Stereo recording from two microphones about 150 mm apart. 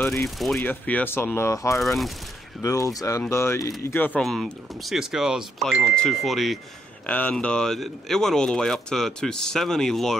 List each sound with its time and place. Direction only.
0.0 s speech: 20° left (ahead or behind)
1.8 s speech: centre (ahead or behind)
2.6 s speech: 20° left (ahead or behind)
4.2 s speech: centre (ahead or behind)